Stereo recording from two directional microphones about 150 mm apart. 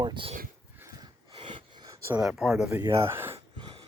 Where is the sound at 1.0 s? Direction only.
30° right (ahead or behind).